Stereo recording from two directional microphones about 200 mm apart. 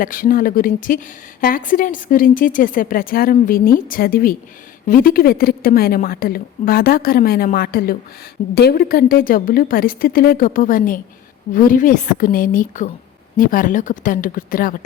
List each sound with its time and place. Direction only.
0.0 s a woman's voice: 45° left (ahead or behind)